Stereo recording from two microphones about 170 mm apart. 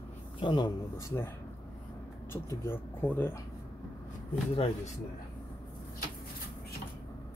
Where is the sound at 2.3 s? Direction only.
15° left (ahead or behind).